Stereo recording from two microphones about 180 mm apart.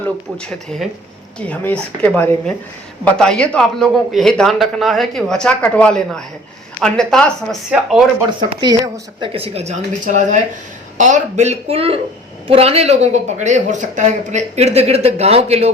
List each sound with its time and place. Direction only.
0.0 s a man's voice: 5° left (ahead or behind)
8.6 s a woman's voice: 20° right (ahead or behind)
9.3 s speech: 35° right (ahead or behind)